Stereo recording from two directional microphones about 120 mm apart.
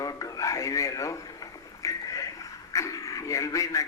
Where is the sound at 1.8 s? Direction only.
30° left (ahead or behind).